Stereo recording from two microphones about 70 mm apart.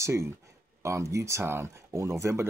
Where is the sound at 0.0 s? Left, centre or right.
Right.